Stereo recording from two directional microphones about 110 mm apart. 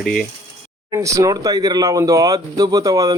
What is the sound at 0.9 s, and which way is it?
Speech, 30° right (ahead or behind).